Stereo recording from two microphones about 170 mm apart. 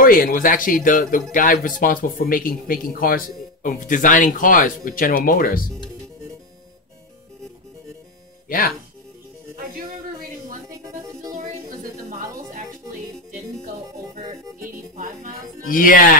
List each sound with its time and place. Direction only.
0.0 s speech: 55° left (ahead or behind)
8.5 s speech: 55° left (ahead or behind)
10.8 s music: 20° right (ahead or behind)
14.2 s music: 20° right (ahead or behind)
15.7 s speech: 55° left (ahead or behind)